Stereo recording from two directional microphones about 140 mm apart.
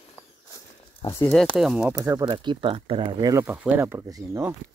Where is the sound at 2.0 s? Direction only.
30° right (ahead or behind).